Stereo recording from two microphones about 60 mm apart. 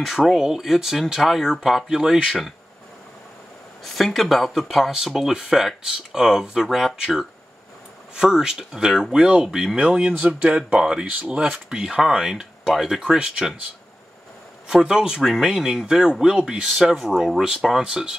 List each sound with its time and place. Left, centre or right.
0.0 s speech: centre
3.8 s speech: centre
11.5 s speech: centre
14.7 s speech: centre